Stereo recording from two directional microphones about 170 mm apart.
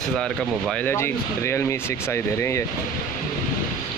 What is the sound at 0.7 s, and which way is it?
Speech, 15° left (ahead or behind).